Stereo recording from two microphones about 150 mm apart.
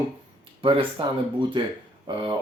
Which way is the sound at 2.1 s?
35° right (ahead or behind).